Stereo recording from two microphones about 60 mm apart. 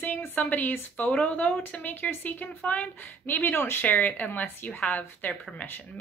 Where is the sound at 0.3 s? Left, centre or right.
Left.